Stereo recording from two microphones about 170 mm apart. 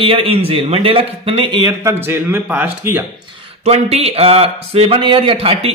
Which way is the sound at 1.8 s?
15° right (ahead or behind).